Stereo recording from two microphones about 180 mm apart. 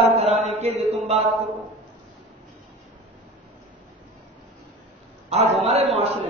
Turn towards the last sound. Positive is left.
turn(degrees=-35)  # may be behind; listen again after turning